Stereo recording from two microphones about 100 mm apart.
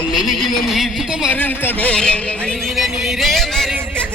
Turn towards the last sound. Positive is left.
turn(degrees=5)  # may be behind; listen again after turning